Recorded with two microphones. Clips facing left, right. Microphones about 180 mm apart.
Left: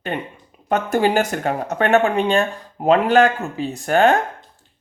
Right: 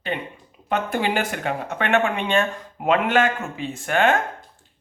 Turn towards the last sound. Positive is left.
turn(degrees=40)  # may be behind; listen again after turning